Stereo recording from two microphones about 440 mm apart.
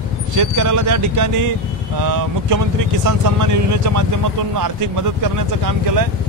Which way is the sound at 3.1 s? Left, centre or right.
Right.